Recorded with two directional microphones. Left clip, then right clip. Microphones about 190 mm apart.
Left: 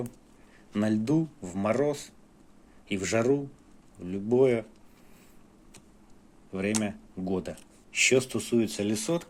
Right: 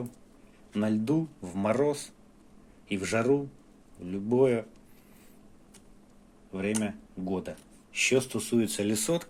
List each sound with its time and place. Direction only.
0.7 s speech: 20° left (ahead or behind)
6.5 s speech: 20° left (ahead or behind); by 9.2 s centre (ahead or behind)